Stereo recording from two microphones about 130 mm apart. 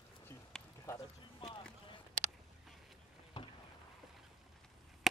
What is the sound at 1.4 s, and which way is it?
Run, 40° left (ahead or behind).